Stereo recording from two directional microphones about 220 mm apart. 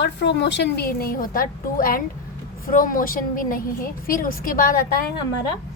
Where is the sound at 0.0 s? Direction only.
50° left (ahead or behind).